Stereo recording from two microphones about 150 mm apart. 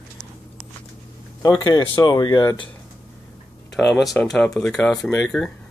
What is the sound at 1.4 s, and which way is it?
Speech, 30° left (ahead or behind).